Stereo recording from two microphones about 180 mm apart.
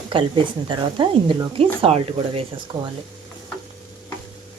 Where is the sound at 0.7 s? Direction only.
25° right (ahead or behind).